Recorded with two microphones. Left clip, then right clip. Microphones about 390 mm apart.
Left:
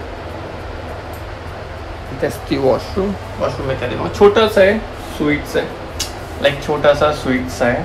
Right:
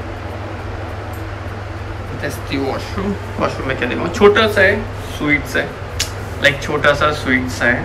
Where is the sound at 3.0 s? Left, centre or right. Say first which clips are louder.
Left 1 dB; centre.